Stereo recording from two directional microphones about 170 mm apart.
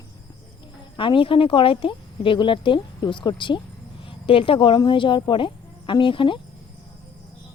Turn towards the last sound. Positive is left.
turn(degrees=30)  # may be behind; listen again after turning